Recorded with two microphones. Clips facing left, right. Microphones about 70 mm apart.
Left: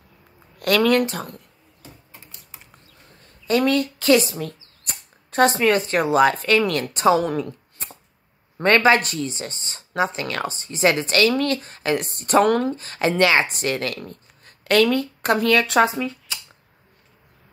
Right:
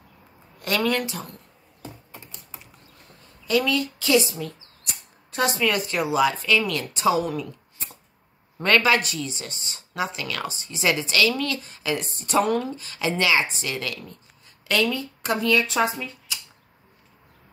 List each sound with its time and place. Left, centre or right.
0.6 s speech: left
3.4 s speech: left
12.7 s a woman's voice: left